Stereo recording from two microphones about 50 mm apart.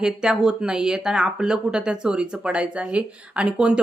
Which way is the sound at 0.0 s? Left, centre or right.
Centre.